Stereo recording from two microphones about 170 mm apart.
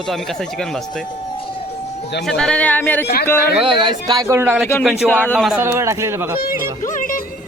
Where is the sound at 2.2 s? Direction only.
5° left (ahead or behind).